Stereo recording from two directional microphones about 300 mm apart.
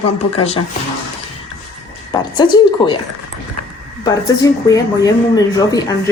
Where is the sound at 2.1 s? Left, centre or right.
Centre.